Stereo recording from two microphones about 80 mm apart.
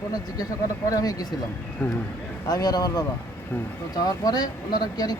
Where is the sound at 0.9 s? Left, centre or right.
Left.